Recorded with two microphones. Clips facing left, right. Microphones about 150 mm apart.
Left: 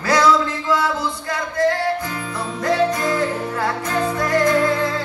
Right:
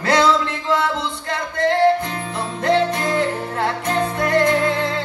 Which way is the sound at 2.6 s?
25° right (ahead or behind).